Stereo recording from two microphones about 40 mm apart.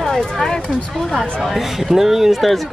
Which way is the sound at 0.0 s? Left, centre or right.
Centre.